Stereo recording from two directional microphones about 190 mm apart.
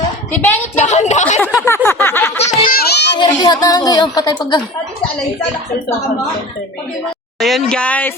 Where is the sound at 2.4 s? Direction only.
40° left (ahead or behind).